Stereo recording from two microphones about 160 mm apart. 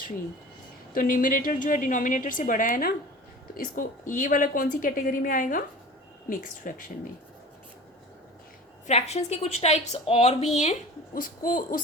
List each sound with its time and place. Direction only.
0.9 s a woman's voice: 60° left (ahead or behind)
6.7 s a woman's voice: 60° left (ahead or behind)
8.9 s a woman's voice: 40° left (ahead or behind)
11.1 s a woman's voice: 55° left (ahead or behind)